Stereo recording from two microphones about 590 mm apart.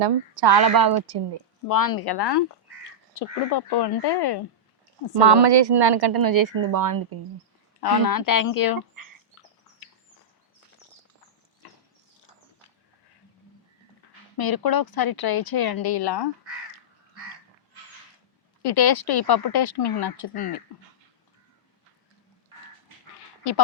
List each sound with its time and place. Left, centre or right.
0.0 s a woman's voice: right
1.6 s speech: left
5.2 s a woman's voice: right
7.8 s speech: left
14.3 s speech: left
18.6 s speech: left